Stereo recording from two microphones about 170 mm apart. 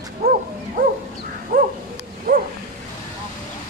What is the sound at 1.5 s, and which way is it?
Dog, 55° right (ahead or behind).